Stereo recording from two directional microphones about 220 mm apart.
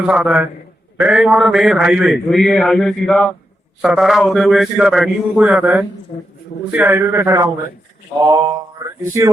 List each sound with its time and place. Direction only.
0.1 s a man's voice: 5° right (ahead or behind)